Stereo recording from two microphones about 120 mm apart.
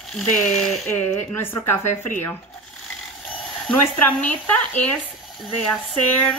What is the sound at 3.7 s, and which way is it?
Speech, 15° left (ahead or behind).